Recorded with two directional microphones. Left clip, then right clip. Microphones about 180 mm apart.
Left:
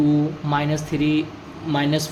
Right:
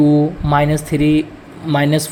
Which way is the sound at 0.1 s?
45° right (ahead or behind).